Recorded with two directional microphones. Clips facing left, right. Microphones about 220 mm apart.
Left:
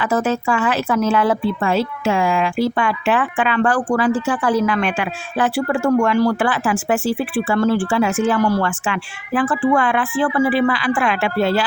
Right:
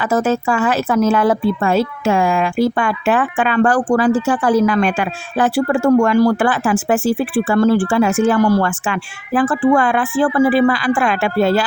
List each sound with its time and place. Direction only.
0.0 s speech: 40° right (ahead or behind)